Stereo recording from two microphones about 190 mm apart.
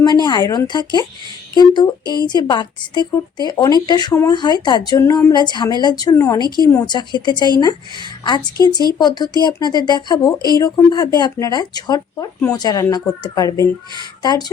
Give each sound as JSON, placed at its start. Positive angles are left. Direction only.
{"t": 0.2, "sound": "speech", "side_deg": 20}
{"t": 9.0, "sound": "speech", "side_deg": 20}